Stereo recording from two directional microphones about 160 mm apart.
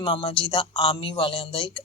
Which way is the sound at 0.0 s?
30° left (ahead or behind).